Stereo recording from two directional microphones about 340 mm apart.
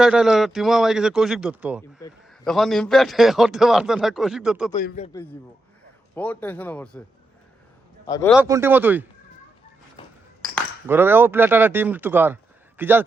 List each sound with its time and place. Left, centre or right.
0.0 s a man's voice: centre
4.8 s a man's voice: left
6.1 s a man's voice: centre
8.0 s speech: centre
8.3 s a man's voice: centre
10.5 s speech: centre